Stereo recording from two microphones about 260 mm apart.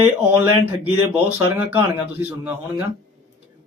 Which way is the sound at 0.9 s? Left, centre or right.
Centre.